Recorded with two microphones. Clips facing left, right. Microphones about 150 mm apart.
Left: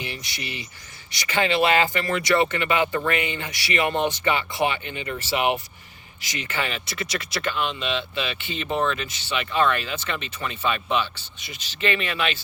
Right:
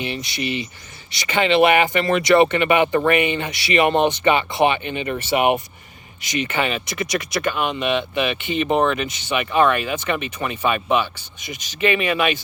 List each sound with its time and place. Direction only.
0.0 s speech: 20° right (ahead or behind)
8.6 s speech: 60° right (ahead or behind)
8.9 s speech: 20° right (ahead or behind)